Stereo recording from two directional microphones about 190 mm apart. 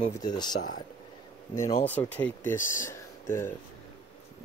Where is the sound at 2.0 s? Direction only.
10° left (ahead or behind).